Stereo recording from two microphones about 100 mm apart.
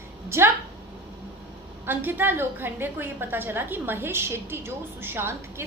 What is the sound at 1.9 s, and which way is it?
A woman's voice, 20° right (ahead or behind).